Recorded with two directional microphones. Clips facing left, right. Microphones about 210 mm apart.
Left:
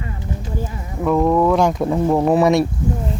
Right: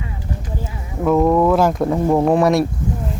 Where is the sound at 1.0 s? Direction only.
Centre (ahead or behind).